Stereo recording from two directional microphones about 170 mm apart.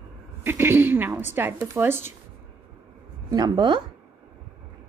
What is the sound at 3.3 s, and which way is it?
Speech, 25° right (ahead or behind).